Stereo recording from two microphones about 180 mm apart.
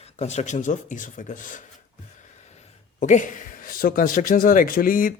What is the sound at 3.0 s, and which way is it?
Speech, 45° left (ahead or behind).